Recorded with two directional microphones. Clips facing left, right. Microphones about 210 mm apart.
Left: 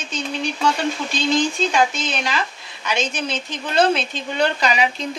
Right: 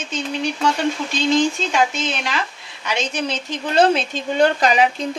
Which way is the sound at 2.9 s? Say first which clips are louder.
Right 1 dB; 35° right (ahead or behind).